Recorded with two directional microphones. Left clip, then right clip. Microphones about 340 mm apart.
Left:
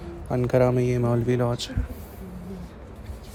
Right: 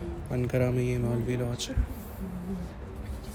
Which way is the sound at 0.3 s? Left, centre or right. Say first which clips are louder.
Left 8 dB; centre.